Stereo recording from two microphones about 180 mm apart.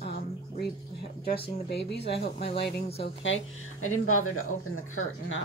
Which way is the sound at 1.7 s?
70° left (ahead or behind).